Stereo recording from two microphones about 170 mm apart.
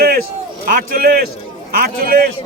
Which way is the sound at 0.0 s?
60° right (ahead or behind).